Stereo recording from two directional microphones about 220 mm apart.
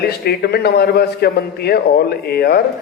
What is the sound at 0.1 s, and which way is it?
A man's voice, 45° left (ahead or behind).